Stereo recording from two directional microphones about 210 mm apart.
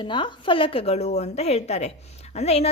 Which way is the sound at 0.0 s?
20° left (ahead or behind).